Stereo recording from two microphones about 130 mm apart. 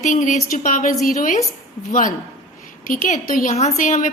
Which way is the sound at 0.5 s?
85° left.